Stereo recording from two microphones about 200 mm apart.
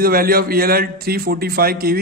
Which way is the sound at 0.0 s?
45° right (ahead or behind).